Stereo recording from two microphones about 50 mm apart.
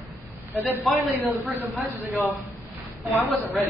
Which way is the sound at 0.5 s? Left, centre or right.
Right.